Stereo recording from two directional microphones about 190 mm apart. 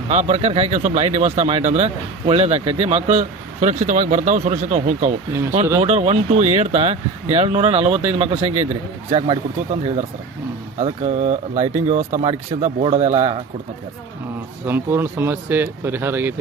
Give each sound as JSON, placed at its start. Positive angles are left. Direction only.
{"t": 0.1, "sound": "speech", "side_deg": -35}
{"t": 10.8, "sound": "speech", "side_deg": -35}
{"t": 14.7, "sound": "speech", "side_deg": -10}